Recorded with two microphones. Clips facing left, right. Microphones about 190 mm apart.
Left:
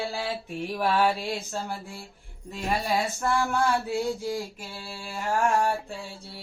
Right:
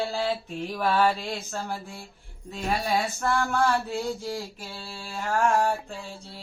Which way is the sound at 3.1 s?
15° left (ahead or behind).